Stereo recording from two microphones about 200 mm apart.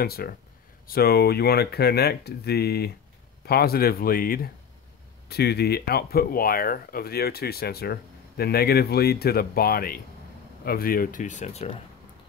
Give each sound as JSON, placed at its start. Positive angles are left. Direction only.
{"t": 0.0, "sound": "speech", "side_deg": 50}